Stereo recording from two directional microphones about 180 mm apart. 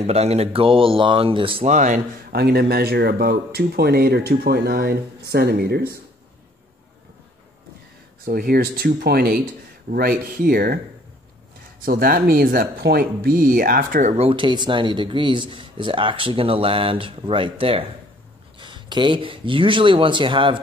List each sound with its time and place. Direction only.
0.0 s speech: 35° right (ahead or behind)
2.3 s speech: 60° right (ahead or behind)
8.3 s speech: 55° right (ahead or behind)
11.8 s speech: 55° right (ahead or behind)
14.1 s speech: 30° right (ahead or behind)